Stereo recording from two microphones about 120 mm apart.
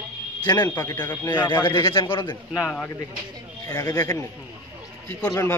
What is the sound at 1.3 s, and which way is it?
Speech, 15° left (ahead or behind).